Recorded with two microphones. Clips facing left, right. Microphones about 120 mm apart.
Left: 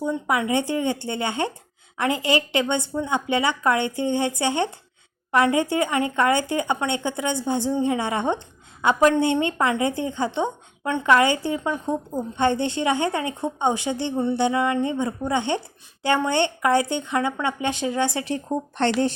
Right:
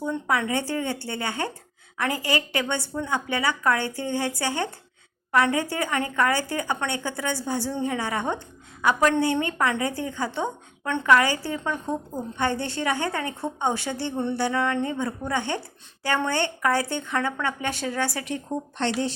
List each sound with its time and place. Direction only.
0.0 s a woman's voice: 15° left (ahead or behind); by 18.5 s 35° left (ahead or behind)
18.8 s speech: 55° left (ahead or behind)